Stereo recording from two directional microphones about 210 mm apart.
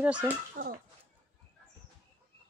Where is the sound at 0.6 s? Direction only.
40° right (ahead or behind).